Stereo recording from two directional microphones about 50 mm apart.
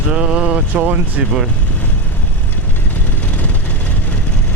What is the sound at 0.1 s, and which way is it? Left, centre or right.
Speech, centre.